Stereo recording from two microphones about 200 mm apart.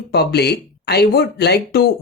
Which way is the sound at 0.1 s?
55° left (ahead or behind).